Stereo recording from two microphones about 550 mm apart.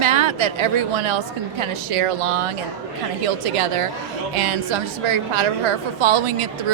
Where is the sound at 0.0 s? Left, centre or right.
Right.